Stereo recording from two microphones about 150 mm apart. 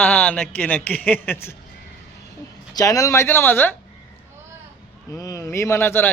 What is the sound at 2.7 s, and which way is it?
Speech, 25° left (ahead or behind).